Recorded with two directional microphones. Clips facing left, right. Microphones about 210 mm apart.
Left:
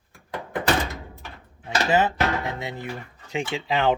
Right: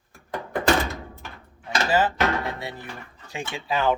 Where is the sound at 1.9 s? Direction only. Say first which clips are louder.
Even; 20° left (ahead or behind).